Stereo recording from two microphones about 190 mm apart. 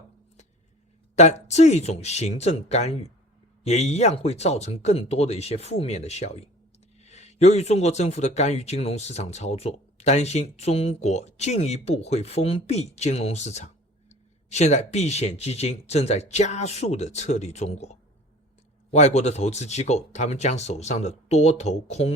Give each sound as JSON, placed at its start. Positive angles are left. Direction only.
{"t": 1.1, "sound": "speech", "side_deg": 35}